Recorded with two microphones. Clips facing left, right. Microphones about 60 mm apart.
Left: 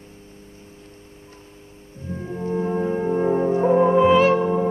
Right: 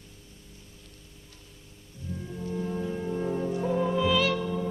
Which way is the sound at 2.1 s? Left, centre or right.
Left.